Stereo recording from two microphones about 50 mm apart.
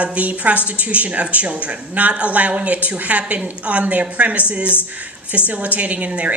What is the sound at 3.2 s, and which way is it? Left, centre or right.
A woman's voice, right.